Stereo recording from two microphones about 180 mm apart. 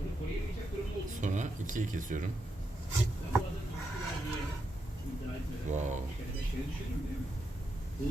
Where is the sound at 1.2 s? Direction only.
45° right (ahead or behind).